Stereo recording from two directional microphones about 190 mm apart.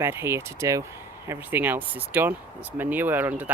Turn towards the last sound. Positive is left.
turn(degrees=-10)  # may be behind; listen again after turning